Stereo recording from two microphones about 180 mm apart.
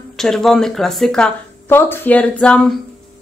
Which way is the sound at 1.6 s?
15° left (ahead or behind).